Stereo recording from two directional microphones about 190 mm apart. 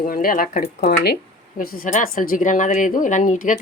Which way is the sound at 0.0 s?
50° left (ahead or behind).